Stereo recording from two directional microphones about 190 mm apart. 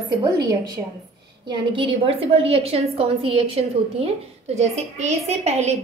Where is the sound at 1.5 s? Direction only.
25° right (ahead or behind).